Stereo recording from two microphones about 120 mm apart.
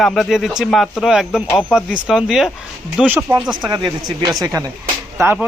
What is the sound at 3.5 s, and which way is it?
Speech, 35° right (ahead or behind).